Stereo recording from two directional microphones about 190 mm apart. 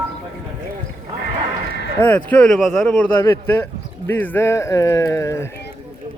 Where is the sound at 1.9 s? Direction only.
10° left (ahead or behind).